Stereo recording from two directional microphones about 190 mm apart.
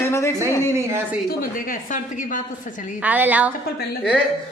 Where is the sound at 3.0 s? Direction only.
10° right (ahead or behind).